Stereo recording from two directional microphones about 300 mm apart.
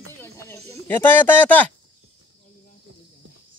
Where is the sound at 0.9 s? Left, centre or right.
Centre.